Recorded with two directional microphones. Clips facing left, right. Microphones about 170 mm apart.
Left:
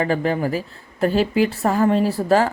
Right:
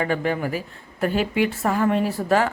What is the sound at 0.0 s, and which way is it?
A woman's voice, 35° left (ahead or behind).